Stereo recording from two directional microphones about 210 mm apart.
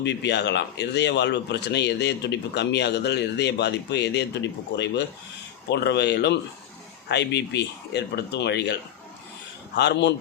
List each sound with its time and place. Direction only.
0.0 s speech: 55° left (ahead or behind)